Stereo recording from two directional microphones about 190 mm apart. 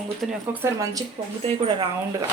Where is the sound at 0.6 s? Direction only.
15° right (ahead or behind).